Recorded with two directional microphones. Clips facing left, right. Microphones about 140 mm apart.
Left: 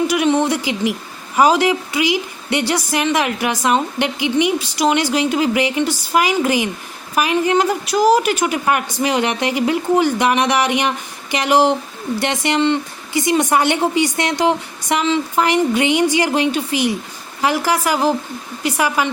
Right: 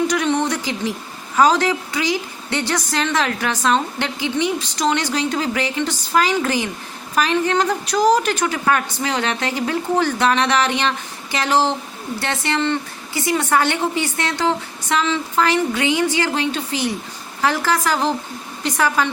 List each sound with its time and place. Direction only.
0.1 s a woman's voice: 10° left (ahead or behind)